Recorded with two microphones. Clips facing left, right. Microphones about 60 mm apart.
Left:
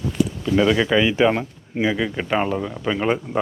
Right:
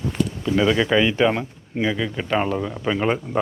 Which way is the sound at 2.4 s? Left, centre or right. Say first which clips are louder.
Even; centre.